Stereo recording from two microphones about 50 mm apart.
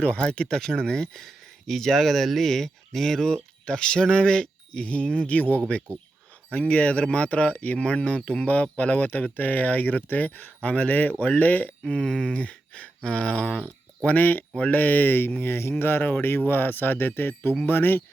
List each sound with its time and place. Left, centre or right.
0.0 s speech: left
11.9 s speech: centre
14.2 s speech: left